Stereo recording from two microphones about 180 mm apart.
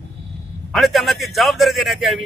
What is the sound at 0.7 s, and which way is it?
A man's voice, centre (ahead or behind).